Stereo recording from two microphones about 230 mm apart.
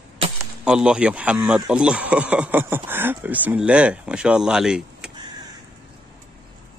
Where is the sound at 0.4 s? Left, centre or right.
Centre.